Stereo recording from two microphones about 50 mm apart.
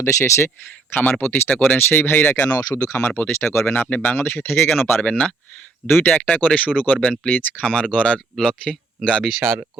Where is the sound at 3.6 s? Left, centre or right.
Left.